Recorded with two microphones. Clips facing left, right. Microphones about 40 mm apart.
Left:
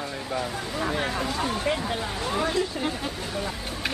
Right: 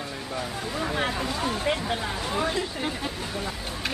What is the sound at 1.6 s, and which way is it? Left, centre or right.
Speech, centre.